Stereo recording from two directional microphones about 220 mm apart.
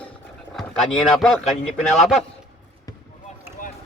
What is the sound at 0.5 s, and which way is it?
Speech, centre (ahead or behind).